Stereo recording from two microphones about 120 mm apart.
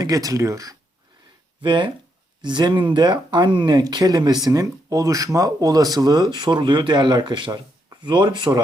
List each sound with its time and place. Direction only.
0.0 s speech: 30° right (ahead or behind)
1.6 s speech: 40° right (ahead or behind)